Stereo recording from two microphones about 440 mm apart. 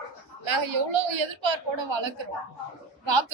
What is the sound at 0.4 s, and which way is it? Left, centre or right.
A woman's voice, right.